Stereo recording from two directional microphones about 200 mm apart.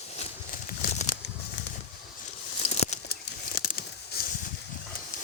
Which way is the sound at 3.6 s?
50° left (ahead or behind).